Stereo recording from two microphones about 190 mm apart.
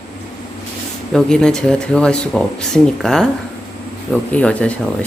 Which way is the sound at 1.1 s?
5° left (ahead or behind).